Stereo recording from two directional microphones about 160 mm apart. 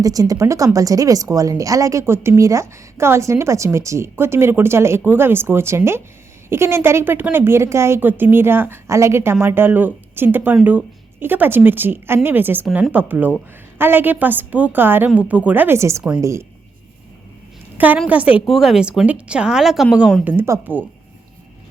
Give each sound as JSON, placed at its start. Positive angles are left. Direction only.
{"t": 0.0, "sound": "a woman's voice", "side_deg": -20}
{"t": 17.7, "sound": "a woman's voice", "side_deg": -10}
{"t": 20.2, "sound": "a woman's voice", "side_deg": -15}